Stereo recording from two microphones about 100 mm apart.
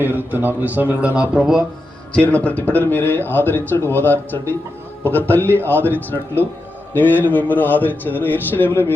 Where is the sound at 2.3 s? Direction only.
15° left (ahead or behind).